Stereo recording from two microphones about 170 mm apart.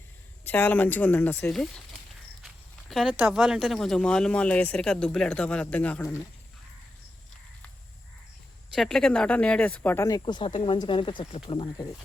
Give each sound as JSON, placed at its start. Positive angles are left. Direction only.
{"t": 0.4, "sound": "a woman's voice", "side_deg": 10}
{"t": 2.9, "sound": "speech", "side_deg": -5}
{"t": 8.7, "sound": "speech", "side_deg": 0}